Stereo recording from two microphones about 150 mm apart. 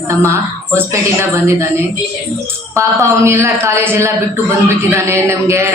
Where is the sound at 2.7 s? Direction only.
20° right (ahead or behind).